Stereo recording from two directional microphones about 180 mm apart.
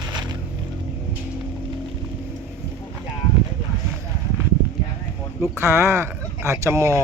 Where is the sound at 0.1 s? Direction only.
25° right (ahead or behind).